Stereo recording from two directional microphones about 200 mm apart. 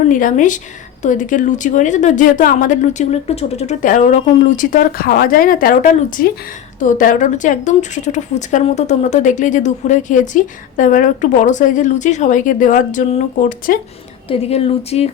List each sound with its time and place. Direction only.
0.1 s a woman's voice: 40° left (ahead or behind)